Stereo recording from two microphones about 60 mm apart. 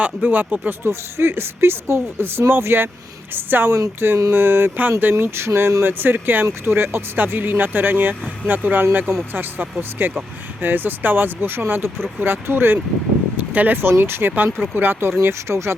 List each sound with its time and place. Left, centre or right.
0.0 s speech: right
0.9 s speech: right
5.1 s speech: right
13.9 s speech: right